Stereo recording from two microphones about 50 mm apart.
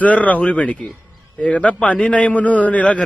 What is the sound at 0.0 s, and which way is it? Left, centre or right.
A man's voice, left.